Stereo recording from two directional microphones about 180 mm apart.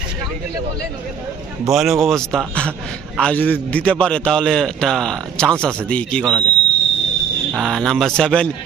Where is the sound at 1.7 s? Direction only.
Centre (ahead or behind).